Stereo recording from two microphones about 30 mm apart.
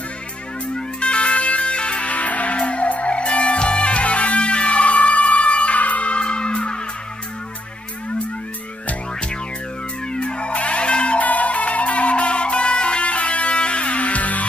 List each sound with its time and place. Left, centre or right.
0.9 s music: left
2.0 s music: left
10.1 s music: left
11.2 s music: left